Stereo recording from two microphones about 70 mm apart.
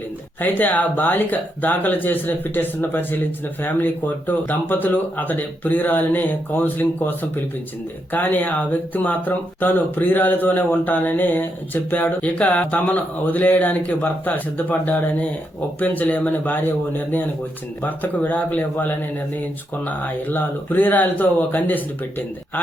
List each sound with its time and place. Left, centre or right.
0.3 s speech: left